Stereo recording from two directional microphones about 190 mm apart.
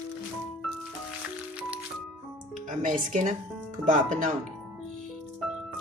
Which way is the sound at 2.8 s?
40° right (ahead or behind).